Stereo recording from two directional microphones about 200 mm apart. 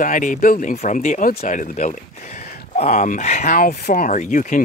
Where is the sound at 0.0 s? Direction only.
40° left (ahead or behind).